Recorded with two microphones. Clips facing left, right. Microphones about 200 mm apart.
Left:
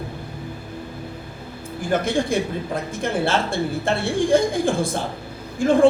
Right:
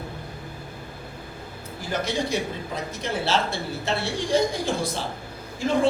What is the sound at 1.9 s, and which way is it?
Speech, 50° left (ahead or behind).